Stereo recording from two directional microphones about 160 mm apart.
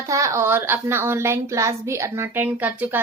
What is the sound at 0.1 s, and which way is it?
A woman's voice, 20° right (ahead or behind).